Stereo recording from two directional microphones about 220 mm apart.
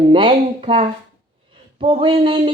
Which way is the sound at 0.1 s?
25° right (ahead or behind).